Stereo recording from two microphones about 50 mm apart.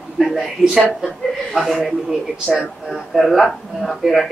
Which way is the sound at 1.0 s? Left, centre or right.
Centre.